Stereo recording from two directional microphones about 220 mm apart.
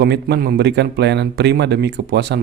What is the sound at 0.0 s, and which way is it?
Speech, 45° right (ahead or behind).